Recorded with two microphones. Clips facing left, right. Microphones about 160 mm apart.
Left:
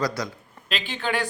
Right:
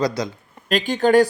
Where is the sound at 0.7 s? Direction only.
45° right (ahead or behind).